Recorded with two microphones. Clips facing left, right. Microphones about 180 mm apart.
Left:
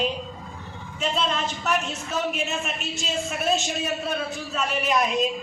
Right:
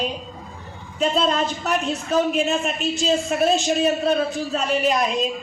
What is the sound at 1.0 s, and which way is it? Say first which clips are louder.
A man's voice: right 6 dB; 35° right (ahead or behind).